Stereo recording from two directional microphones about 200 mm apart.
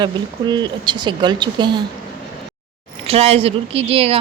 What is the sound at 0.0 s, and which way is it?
Speech, 20° right (ahead or behind).